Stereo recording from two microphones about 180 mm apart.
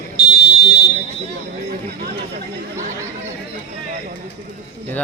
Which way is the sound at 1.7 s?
60° right (ahead or behind).